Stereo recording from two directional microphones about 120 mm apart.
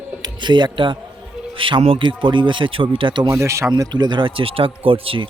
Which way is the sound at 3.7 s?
35° right (ahead or behind).